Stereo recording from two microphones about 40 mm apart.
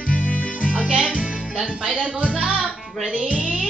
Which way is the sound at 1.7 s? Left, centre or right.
Right.